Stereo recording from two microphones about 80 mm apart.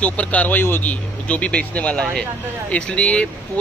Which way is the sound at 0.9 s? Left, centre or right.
Centre.